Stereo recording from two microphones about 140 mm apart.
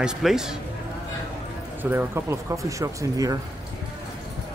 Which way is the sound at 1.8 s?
15° right (ahead or behind).